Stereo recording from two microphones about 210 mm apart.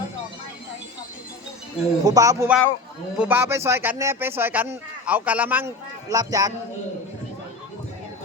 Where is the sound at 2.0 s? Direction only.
15° right (ahead or behind).